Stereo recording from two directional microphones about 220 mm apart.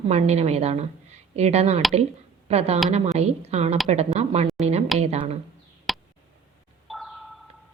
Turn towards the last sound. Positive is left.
turn(degrees=0)  # may be behind; listen again after turning